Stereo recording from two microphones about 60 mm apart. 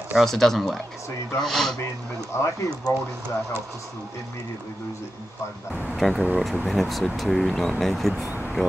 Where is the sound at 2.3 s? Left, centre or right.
Left.